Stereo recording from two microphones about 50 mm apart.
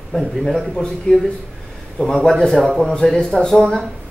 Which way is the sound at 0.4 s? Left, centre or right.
Centre.